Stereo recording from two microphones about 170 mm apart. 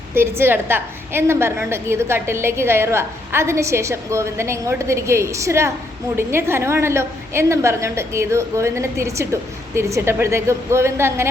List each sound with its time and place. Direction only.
0.1 s a woman's voice: 15° right (ahead or behind)